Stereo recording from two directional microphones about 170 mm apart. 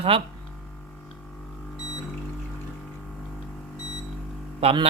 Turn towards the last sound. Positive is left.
turn(degrees=-35)  # may be behind; listen again after turning